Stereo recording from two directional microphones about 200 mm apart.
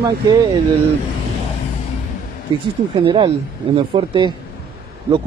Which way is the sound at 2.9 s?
25° right (ahead or behind).